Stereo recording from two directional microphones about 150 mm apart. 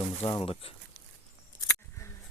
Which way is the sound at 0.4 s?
40° left (ahead or behind).